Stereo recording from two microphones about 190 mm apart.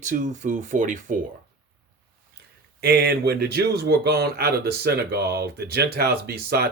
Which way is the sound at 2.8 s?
55° right (ahead or behind).